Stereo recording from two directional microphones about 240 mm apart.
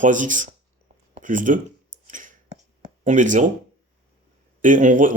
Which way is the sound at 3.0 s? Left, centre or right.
Right.